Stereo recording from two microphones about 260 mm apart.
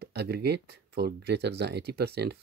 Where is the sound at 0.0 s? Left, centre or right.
Right.